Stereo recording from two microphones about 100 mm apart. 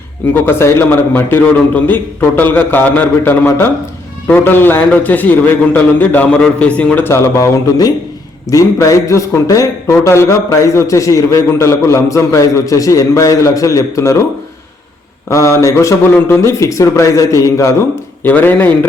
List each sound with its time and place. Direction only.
0.3 s a man's voice: 25° left (ahead or behind)
7.0 s a man's voice: 30° left (ahead or behind)
15.3 s a man's voice: 30° left (ahead or behind)
18.2 s a man's voice: 20° left (ahead or behind)